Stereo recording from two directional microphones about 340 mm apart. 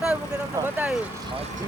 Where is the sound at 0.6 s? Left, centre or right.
Centre.